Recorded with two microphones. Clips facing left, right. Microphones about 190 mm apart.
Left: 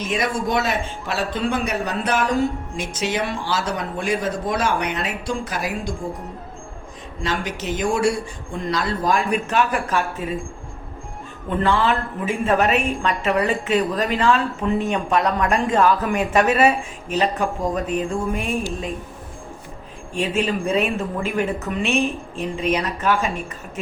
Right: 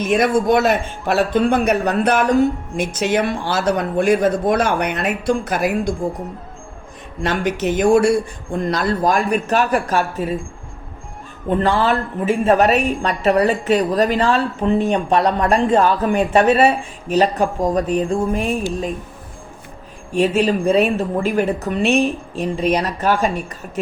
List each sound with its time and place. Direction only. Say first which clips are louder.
0.0 s speech: right 7 dB; 55° right (ahead or behind)
7.2 s a woman's voice: right 6 dB; 55° right (ahead or behind); by 10.3 s 40° right (ahead or behind)
11.4 s a woman's voice: right 3 dB; 35° right (ahead or behind)
20.1 s a woman's voice: right 6 dB; 35° right (ahead or behind)